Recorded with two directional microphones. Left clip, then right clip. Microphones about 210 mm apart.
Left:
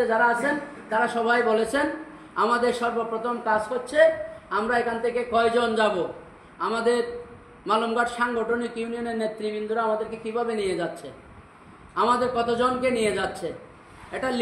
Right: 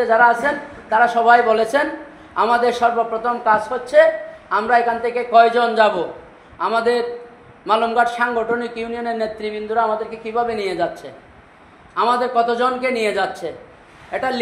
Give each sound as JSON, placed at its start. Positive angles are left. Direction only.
{"t": 0.0, "sound": "a man's voice", "side_deg": 15}